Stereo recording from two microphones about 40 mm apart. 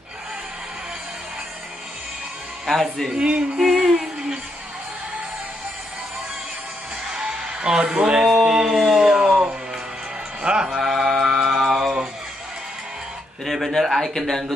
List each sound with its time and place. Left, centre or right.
2.6 s a man's voice: centre
3.2 s music: right
3.5 s music: centre
7.1 s music: right
8.5 s a sound: centre
10.4 s mantra: right
10.7 s mantra: centre
13.5 s a sound: centre
14.1 s speech: centre